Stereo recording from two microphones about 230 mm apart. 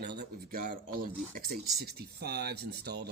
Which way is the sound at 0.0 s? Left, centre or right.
Right.